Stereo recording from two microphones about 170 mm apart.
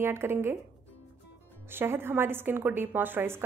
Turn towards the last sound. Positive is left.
turn(degrees=-10)  # may be behind; listen again after turning